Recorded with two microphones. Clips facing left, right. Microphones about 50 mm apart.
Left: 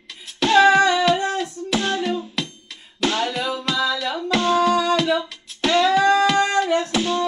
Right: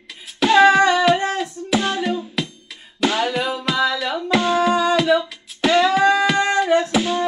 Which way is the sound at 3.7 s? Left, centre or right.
Centre.